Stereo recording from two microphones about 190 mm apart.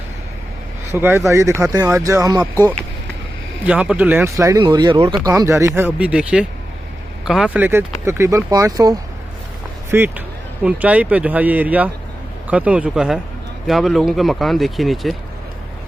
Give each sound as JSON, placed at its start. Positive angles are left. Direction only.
{"t": 0.9, "sound": "speech", "side_deg": -10}
{"t": 3.6, "sound": "speech", "side_deg": -5}